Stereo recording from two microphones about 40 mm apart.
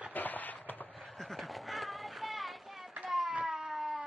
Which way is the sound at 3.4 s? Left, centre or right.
Centre.